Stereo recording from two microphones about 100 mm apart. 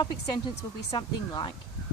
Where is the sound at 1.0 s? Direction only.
50° left (ahead or behind).